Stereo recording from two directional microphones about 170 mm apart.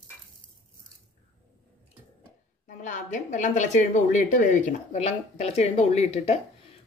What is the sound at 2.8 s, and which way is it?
A woman's voice, 45° left (ahead or behind).